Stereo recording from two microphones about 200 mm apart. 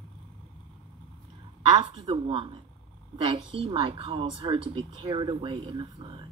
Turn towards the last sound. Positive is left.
turn(degrees=-25)  # may be behind; listen again after turning